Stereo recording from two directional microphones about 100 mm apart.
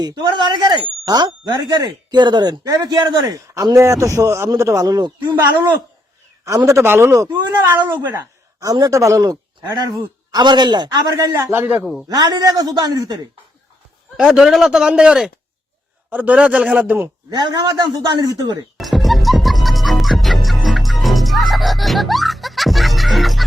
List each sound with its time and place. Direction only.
0.0 s speech: 40° right (ahead or behind)
6.7 s a man's voice: 25° right (ahead or behind)
8.6 s a man's voice: 35° right (ahead or behind)
11.4 s a man's voice: 20° right (ahead or behind)
12.0 s speech: 45° right (ahead or behind)
14.2 s a man's voice: 5° right (ahead or behind)
17.3 s speech: 45° right (ahead or behind)
18.8 s music: centre (ahead or behind)